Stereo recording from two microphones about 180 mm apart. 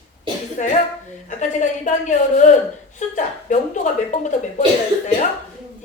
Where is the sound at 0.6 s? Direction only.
45° left (ahead or behind).